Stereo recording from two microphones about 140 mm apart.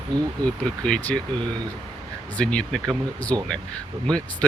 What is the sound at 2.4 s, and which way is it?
Speech, 5° left (ahead or behind).